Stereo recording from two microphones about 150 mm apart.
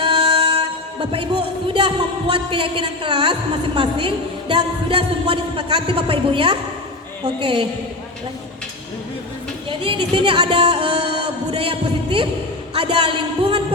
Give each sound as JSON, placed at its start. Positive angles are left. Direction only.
{"t": 0.0, "sound": "music", "side_deg": -40}
{"t": 3.8, "sound": "a woman's voice", "side_deg": -35}
{"t": 9.6, "sound": "music", "side_deg": -35}
{"t": 11.5, "sound": "a woman's voice", "side_deg": -35}